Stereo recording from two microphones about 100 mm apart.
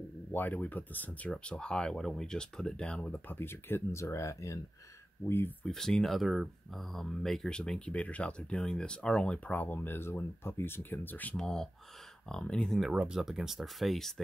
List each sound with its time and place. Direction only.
0.3 s speech: 20° left (ahead or behind)
5.7 s speech: 5° left (ahead or behind)
11.3 s speech: 5° left (ahead or behind)
12.9 s speech: 10° right (ahead or behind)